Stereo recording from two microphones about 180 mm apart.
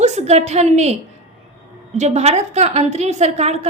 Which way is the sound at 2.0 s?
40° right (ahead or behind).